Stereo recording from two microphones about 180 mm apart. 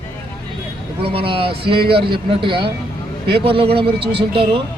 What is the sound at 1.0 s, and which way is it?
Speech, 30° right (ahead or behind).